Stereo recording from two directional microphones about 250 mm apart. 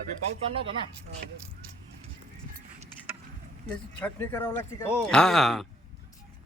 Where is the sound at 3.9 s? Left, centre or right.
Centre.